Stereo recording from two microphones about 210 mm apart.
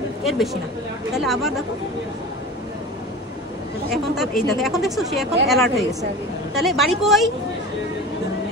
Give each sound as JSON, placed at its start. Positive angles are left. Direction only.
{"t": 0.2, "sound": "speech", "side_deg": 0}
{"t": 3.9, "sound": "speech", "side_deg": 0}